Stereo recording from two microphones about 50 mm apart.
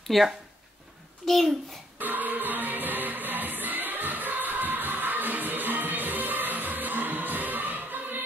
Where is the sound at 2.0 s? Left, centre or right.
Right.